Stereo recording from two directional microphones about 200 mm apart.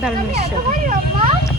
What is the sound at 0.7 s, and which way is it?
Speech, 40° right (ahead or behind).